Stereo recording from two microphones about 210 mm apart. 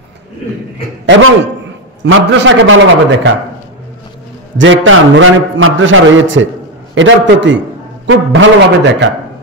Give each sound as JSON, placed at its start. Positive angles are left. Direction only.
{"t": 1.0, "sound": "a man's voice", "side_deg": -65}
{"t": 4.6, "sound": "a man's voice", "side_deg": -65}